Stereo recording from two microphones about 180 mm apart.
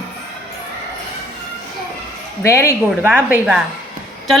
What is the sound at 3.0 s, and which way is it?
Speech, 10° right (ahead or behind).